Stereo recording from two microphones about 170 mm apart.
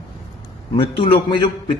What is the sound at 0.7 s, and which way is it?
A man's voice, 30° left (ahead or behind).